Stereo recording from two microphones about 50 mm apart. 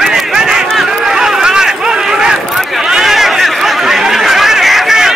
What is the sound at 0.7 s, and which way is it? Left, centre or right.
Run, centre.